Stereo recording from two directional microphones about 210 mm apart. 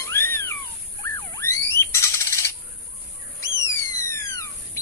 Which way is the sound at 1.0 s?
15° left (ahead or behind).